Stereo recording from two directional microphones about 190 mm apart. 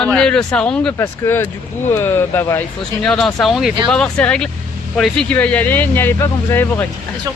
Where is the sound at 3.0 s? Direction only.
Centre (ahead or behind).